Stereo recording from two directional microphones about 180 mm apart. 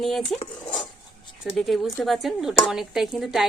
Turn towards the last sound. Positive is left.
turn(degrees=0)  # may be behind; listen again after turning